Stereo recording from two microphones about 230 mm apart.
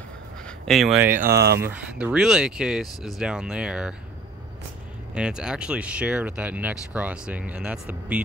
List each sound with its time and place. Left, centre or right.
0.7 s speech: centre
1.2 s speech: right
1.6 s speech: centre
5.1 s speech: centre